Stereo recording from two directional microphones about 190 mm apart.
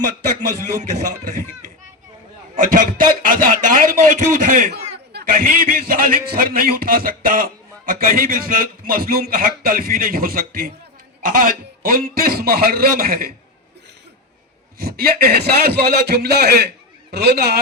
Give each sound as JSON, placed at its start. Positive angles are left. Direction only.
{"t": 0.8, "sound": "a man's voice", "side_deg": -45}
{"t": 2.6, "sound": "a sound", "side_deg": -45}
{"t": 5.9, "sound": "a man's voice", "side_deg": -50}
{"t": 14.8, "sound": "a man's voice", "side_deg": -50}